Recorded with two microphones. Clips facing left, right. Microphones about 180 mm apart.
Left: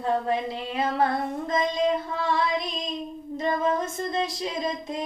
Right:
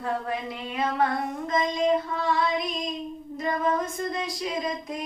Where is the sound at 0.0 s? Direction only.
30° left (ahead or behind).